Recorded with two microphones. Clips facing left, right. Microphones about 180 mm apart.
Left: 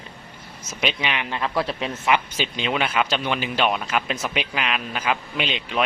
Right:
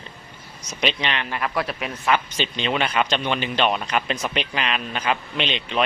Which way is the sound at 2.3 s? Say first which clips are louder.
Right 1 dB; 10° left (ahead or behind).